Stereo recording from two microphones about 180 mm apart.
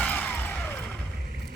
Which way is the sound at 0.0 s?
10° left (ahead or behind).